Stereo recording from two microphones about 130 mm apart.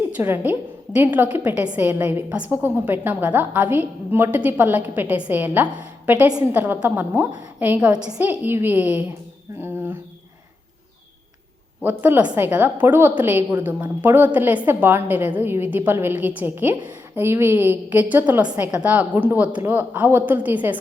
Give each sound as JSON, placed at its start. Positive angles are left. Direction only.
{"t": 0.2, "sound": "a woman's voice", "side_deg": -15}
{"t": 11.8, "sound": "a woman's voice", "side_deg": -15}